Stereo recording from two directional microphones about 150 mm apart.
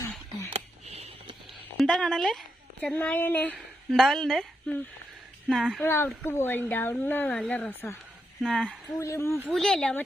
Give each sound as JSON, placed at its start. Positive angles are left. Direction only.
{"t": 0.5, "sound": "a sound", "side_deg": -45}
{"t": 1.7, "sound": "speech", "side_deg": 0}
{"t": 3.5, "sound": "a woman's voice", "side_deg": 0}
{"t": 5.8, "sound": "speech", "side_deg": 15}
{"t": 8.4, "sound": "speech", "side_deg": 5}
{"t": 9.0, "sound": "speech", "side_deg": 20}
{"t": 9.5, "sound": "speech", "side_deg": 5}